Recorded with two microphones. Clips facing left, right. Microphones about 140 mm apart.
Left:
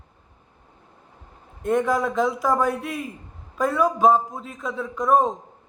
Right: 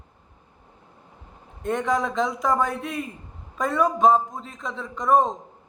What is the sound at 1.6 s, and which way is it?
Speech, 5° left (ahead or behind).